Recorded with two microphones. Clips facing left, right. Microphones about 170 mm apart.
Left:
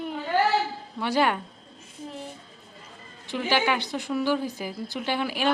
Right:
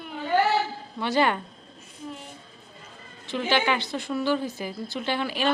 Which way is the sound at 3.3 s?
10° left (ahead or behind).